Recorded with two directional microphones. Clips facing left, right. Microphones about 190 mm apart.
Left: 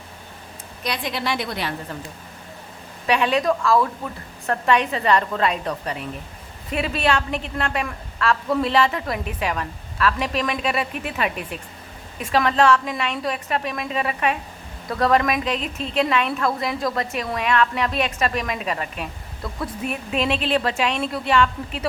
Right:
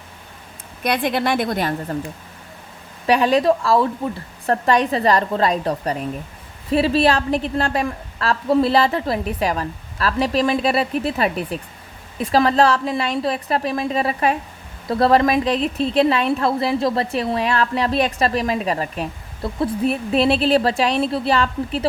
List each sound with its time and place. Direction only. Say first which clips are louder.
0.9 s a woman's voice: right 6 dB; 55° right (ahead or behind)
3.1 s a woman's voice: right 4 dB; 35° right (ahead or behind)